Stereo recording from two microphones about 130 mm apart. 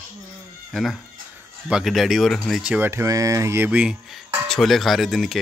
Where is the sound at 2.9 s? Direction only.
25° right (ahead or behind).